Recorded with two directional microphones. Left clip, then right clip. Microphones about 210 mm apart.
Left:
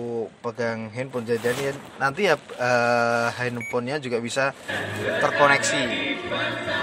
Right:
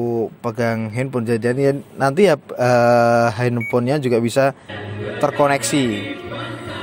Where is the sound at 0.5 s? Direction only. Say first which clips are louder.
Right 4 dB; 55° right (ahead or behind).